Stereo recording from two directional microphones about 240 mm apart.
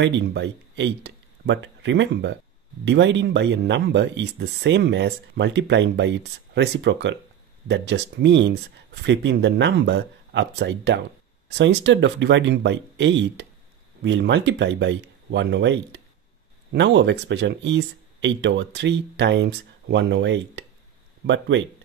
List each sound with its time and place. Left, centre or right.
0.0 s speech: right